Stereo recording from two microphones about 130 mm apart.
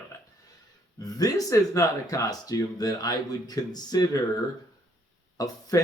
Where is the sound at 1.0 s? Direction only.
30° left (ahead or behind).